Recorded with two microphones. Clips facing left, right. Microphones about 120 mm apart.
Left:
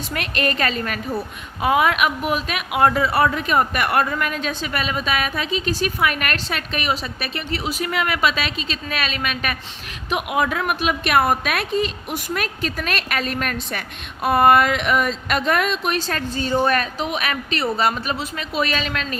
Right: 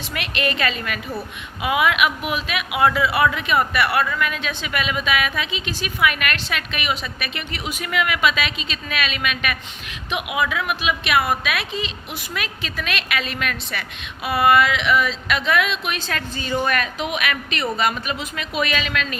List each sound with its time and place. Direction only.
0.1 s a woman's voice: 40° left (ahead or behind)